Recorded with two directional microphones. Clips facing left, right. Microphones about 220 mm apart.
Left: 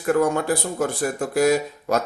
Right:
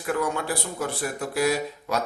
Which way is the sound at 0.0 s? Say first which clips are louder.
Left 7 dB; 45° left (ahead or behind).